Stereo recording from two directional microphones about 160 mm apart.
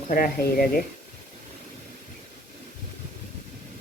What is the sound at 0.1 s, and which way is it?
Speech, 65° left (ahead or behind).